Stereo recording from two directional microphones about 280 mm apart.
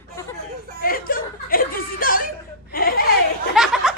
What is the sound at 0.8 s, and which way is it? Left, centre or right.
Chuckle, left.